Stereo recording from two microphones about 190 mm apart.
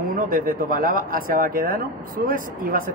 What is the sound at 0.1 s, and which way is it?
Speech, 45° right (ahead or behind).